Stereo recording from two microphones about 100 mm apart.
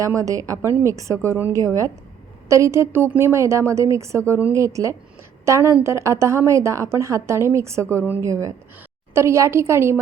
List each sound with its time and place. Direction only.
0.0 s a woman's voice: 35° right (ahead or behind)
8.2 s a woman's voice: 30° right (ahead or behind)